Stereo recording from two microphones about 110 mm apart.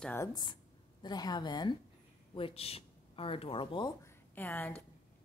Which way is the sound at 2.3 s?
60° left (ahead or behind).